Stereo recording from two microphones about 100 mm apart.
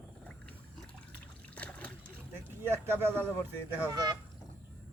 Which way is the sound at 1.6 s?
15° left (ahead or behind).